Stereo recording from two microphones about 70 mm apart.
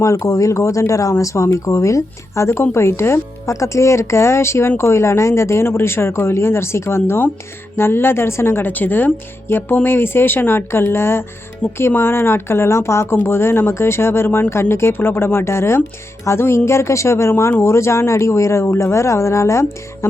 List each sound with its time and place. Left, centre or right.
0.0 s a woman's voice: left